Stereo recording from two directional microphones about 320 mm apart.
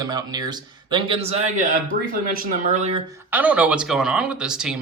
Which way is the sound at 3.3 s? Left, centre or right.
Centre.